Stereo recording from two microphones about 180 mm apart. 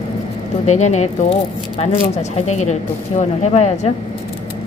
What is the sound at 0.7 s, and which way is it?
Speech, 40° left (ahead or behind).